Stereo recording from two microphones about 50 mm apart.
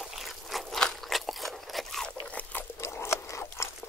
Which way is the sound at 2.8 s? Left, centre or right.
Left.